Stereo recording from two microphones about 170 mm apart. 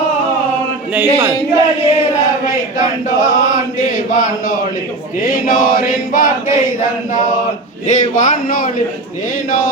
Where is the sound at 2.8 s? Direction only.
50° left (ahead or behind).